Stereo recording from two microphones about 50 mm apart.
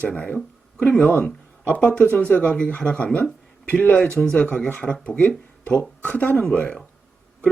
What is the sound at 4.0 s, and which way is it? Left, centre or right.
Speech, centre.